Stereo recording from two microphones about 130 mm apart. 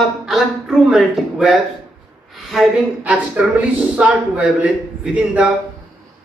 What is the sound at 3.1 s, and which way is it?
A man's voice, 10° right (ahead or behind).